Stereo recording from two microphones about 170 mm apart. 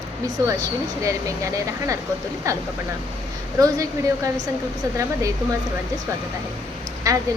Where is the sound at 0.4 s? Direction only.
20° right (ahead or behind).